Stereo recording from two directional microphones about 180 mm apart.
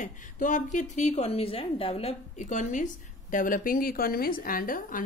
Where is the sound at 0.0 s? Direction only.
45° left (ahead or behind).